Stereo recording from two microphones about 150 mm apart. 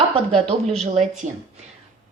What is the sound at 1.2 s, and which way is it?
Speech, 55° right (ahead or behind).